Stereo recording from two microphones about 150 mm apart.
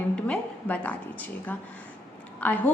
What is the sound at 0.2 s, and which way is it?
A woman's voice, 10° left (ahead or behind).